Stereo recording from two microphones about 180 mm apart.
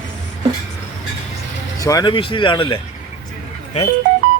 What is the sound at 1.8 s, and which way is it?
Speech, 20° left (ahead or behind).